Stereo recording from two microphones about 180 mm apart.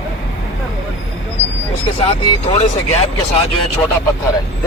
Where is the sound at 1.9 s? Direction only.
30° left (ahead or behind).